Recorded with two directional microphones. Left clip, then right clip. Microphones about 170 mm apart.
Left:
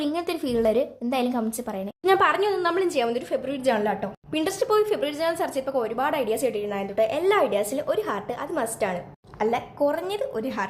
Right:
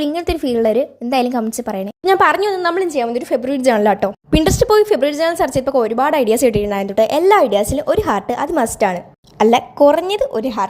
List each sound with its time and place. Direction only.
0.0 s a woman's voice: 30° right (ahead or behind)